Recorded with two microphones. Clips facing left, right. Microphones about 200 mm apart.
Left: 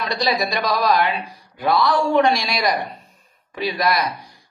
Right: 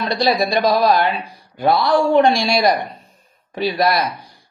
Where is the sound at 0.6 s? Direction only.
30° right (ahead or behind).